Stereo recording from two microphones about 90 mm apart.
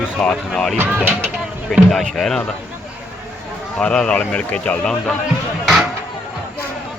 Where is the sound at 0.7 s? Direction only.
25° right (ahead or behind).